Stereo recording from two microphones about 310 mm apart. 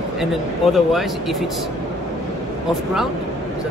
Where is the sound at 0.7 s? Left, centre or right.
Centre.